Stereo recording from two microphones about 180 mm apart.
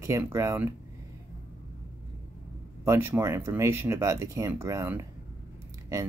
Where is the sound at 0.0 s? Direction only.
15° right (ahead or behind).